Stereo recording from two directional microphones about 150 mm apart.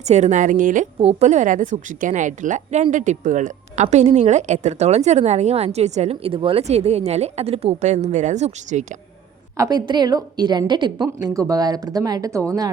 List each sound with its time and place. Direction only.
0.0 s a woman's voice: 50° right (ahead or behind)
0.9 s a woman's voice: 45° right (ahead or behind)
9.6 s a woman's voice: 25° right (ahead or behind)